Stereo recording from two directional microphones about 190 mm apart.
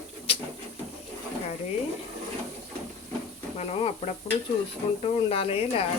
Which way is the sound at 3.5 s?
35° left (ahead or behind).